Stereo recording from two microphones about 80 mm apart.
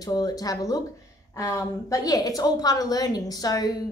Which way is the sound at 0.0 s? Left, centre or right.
Left.